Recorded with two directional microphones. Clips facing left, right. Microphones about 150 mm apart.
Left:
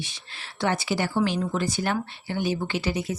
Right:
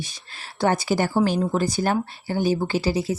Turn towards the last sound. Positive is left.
turn(degrees=-35)  # may be behind; listen again after turning